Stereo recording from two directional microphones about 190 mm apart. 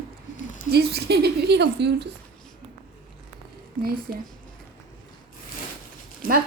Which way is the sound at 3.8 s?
50° right (ahead or behind).